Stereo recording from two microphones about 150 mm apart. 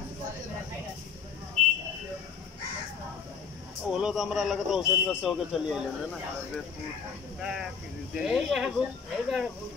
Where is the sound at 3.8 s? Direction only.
5° right (ahead or behind).